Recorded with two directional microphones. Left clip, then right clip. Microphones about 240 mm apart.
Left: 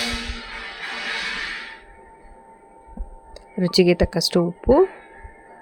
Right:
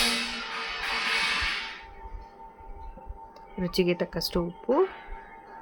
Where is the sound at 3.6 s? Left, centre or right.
Left.